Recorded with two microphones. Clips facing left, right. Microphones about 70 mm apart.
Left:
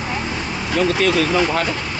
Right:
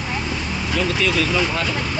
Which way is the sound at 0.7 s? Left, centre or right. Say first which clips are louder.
Left 4 dB; left.